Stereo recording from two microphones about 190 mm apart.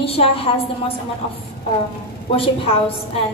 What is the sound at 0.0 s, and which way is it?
Speech, 30° left (ahead or behind).